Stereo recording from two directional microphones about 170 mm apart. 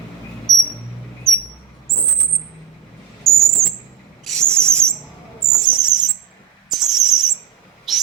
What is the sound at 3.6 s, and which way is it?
Bird flight, 15° right (ahead or behind).